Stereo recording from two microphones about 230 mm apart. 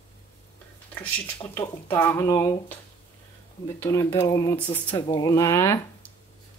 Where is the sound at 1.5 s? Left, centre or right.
Centre.